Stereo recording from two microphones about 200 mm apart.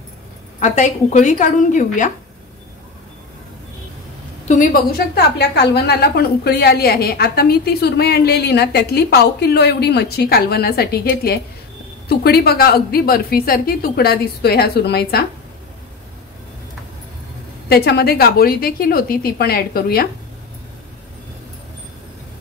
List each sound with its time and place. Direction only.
0.6 s a woman's voice: 35° left (ahead or behind)
4.5 s a woman's voice: 45° left (ahead or behind)
17.6 s a woman's voice: 50° left (ahead or behind)